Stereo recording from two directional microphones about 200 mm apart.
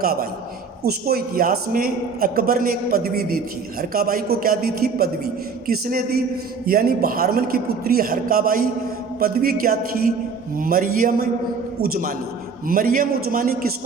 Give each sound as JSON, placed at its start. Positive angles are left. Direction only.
{"t": 0.0, "sound": "a man's voice", "side_deg": -45}